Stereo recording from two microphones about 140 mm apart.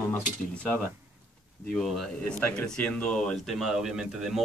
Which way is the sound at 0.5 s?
10° left (ahead or behind).